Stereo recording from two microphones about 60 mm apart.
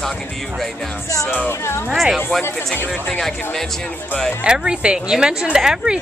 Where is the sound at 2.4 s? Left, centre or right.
Left.